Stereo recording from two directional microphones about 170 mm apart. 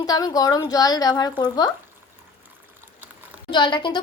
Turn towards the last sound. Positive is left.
turn(degrees=25)  # may be behind; listen again after turning